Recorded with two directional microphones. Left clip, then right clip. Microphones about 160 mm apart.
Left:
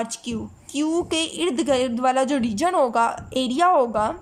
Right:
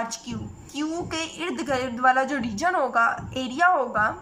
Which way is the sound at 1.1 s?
15° left (ahead or behind).